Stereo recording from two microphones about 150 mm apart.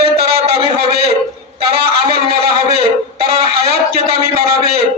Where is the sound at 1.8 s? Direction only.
90° right.